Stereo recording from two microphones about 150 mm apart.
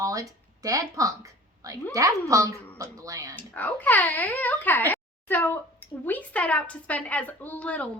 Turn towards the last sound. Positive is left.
turn(degrees=10)  # may be behind; listen again after turning